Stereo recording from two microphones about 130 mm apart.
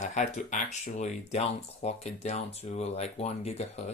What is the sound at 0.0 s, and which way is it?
Speech, 65° left (ahead or behind).